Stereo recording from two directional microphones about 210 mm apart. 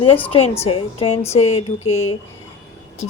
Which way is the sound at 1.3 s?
30° left (ahead or behind).